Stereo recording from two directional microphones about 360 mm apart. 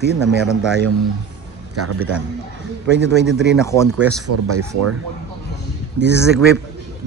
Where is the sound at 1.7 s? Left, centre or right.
Right.